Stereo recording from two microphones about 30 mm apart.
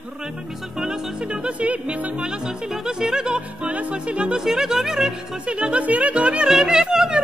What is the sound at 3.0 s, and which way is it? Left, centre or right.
Music, centre.